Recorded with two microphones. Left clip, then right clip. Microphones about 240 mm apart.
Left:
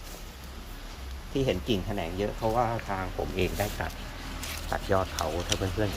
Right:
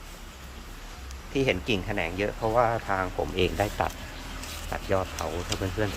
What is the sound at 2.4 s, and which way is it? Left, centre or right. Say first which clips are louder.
Speech: right 4 dB; right.